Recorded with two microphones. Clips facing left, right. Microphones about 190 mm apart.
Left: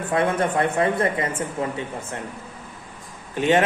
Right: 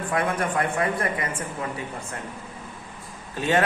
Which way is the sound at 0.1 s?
25° left (ahead or behind).